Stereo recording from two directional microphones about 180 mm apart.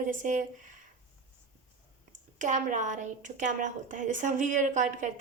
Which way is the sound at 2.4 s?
45° right (ahead or behind).